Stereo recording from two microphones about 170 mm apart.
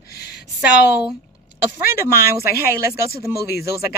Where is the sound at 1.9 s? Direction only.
15° right (ahead or behind).